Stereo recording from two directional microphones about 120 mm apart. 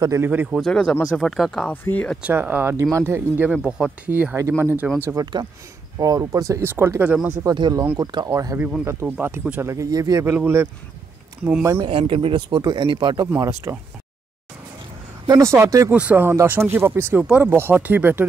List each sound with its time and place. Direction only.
0.0 s speech: 25° right (ahead or behind)
0.3 s speech: 15° right (ahead or behind)
0.6 s speech: 5° left (ahead or behind)
2.2 s speech: 15° right (ahead or behind)
5.2 s speech: 35° right (ahead or behind)
7.5 s speech: 40° right (ahead or behind)
9.4 s speech: 15° right (ahead or behind)
10.2 s speech: 15° right (ahead or behind)
11.7 s speech: 45° right (ahead or behind)
13.4 s speech: 25° right (ahead or behind)
15.2 s speech: 25° right (ahead or behind)
15.9 s speech: 10° right (ahead or behind)